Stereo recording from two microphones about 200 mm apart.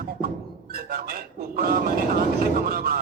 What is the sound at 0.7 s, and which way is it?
Speech, 50° right (ahead or behind).